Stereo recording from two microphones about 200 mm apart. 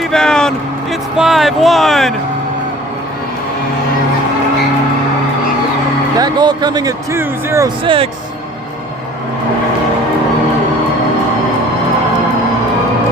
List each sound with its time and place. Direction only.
0.0 s speech: 5° left (ahead or behind)
6.1 s speech: 20° right (ahead or behind)
7.9 s speech: 25° right (ahead or behind)